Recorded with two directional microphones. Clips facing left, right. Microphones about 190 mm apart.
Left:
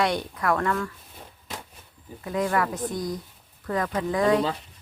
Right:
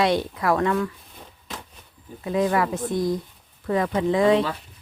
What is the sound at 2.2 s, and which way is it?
Speech, 20° right (ahead or behind).